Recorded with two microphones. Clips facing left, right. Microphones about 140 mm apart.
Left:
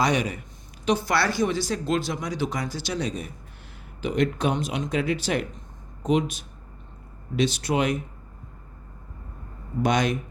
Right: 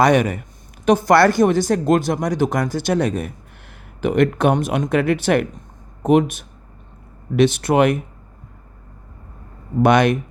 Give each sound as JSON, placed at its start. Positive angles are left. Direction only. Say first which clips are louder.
{"t": 0.0, "sound": "speech", "louder": "right 9 dB", "side_deg": -55}
{"t": 9.8, "sound": "speech", "louder": "right 9 dB", "side_deg": -60}